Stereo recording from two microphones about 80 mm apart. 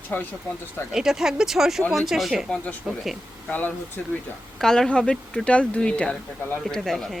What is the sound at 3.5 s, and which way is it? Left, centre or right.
Speech, left.